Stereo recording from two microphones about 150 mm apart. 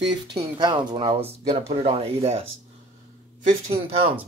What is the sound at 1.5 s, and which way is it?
Speech, 45° right (ahead or behind).